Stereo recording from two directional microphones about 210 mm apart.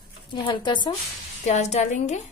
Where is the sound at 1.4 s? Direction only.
35° left (ahead or behind).